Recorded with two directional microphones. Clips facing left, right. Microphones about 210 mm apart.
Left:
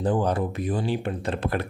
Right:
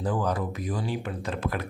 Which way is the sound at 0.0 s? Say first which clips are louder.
Left 4 dB; 30° left (ahead or behind).